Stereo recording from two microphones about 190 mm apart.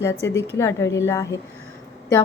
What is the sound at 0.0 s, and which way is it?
A woman's voice, 15° left (ahead or behind).